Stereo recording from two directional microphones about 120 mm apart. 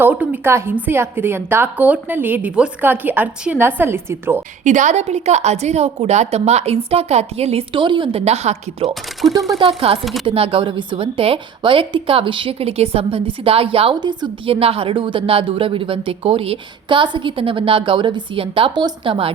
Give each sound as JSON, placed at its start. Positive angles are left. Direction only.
{"t": 0.0, "sound": "a woman's voice", "side_deg": -15}
{"t": 4.6, "sound": "a woman's voice", "side_deg": -90}
{"t": 9.2, "sound": "speech", "side_deg": -40}
{"t": 9.6, "sound": "a woman's voice", "side_deg": -50}
{"t": 10.0, "sound": "speech", "side_deg": 0}
{"t": 10.2, "sound": "a woman's voice", "side_deg": -50}
{"t": 14.0, "sound": "a woman's voice", "side_deg": -40}